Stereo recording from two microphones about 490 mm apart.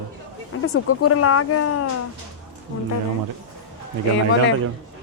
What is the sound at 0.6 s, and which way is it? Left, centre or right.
Speech, left.